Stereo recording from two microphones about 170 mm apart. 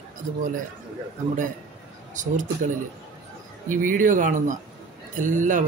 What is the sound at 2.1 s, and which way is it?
A man's voice, 50° right (ahead or behind).